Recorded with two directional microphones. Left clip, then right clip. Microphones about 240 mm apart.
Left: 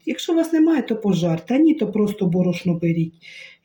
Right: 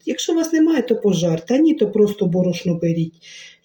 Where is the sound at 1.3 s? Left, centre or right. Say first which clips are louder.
Left 1 dB; right.